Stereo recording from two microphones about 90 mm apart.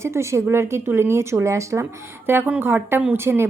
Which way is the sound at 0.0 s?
30° right (ahead or behind).